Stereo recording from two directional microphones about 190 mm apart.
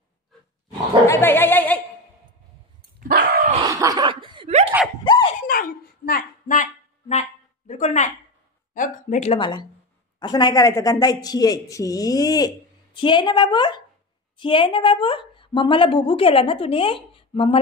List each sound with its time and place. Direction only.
1.0 s speech: 15° left (ahead or behind)
3.2 s dog: 50° right (ahead or behind)
3.5 s a sound: 20° right (ahead or behind)
5.0 s dog: 20° left (ahead or behind)
5.5 s speech: 50° left (ahead or behind)
9.4 s a woman's voice: 25° left (ahead or behind)